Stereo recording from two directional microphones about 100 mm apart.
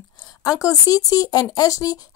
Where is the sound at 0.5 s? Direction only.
35° left (ahead or behind).